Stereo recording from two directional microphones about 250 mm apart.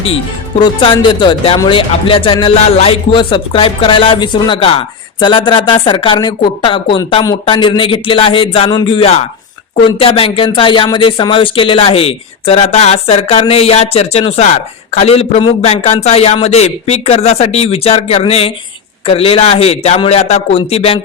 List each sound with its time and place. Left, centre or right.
0.6 s speech: centre